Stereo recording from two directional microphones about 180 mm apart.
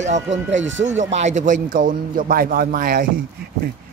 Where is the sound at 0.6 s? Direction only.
90° right.